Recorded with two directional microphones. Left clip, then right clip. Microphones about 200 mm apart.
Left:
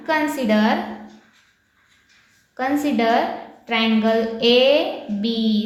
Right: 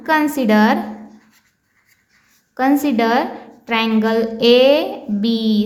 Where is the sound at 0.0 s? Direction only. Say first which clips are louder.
Right 4 dB; 50° right (ahead or behind).